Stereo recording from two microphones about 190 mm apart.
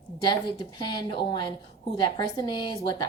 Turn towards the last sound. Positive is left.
turn(degrees=25)  # may be behind; listen again after turning